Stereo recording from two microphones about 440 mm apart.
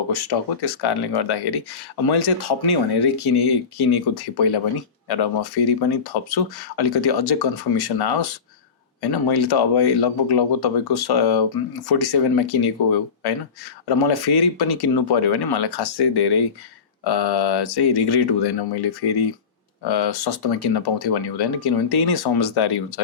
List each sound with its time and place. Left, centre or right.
0.1 s speech: left